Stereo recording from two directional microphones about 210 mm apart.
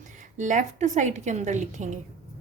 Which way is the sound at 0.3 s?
35° right (ahead or behind).